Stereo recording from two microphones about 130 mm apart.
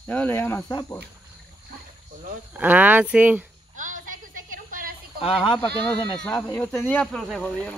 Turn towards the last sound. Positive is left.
turn(degrees=10)  # may be behind; listen again after turning